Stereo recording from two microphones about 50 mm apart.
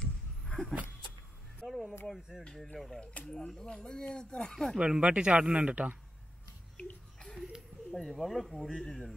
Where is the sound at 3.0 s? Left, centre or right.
Left.